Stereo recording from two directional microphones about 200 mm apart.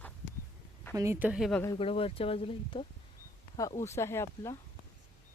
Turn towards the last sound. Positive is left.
turn(degrees=15)  # may be behind; listen again after turning